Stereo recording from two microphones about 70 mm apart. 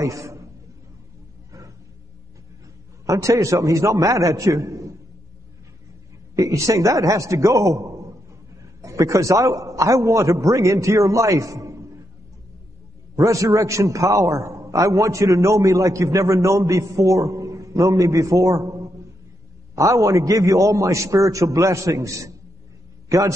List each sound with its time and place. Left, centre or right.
0.0 s a sound: right
3.1 s a man's voice: right
6.3 s a man's voice: right
13.1 s a man's voice: right